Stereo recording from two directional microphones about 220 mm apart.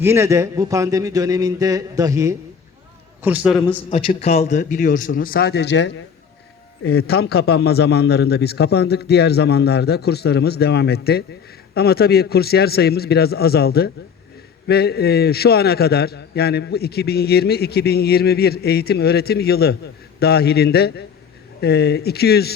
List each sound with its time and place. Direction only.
0.0 s a man's voice: 10° right (ahead or behind)
3.9 s a man's voice: 25° left (ahead or behind); by 22.5 s 45° left (ahead or behind)